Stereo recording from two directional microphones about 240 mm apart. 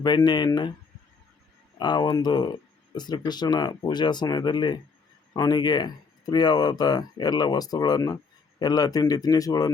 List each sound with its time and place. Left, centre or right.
0.0 s speech: centre
1.8 s speech: centre